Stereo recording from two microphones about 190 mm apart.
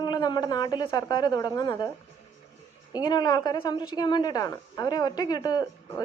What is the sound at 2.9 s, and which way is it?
A woman's voice, 20° left (ahead or behind).